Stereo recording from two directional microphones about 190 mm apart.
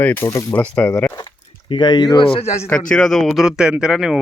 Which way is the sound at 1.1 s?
25° left (ahead or behind).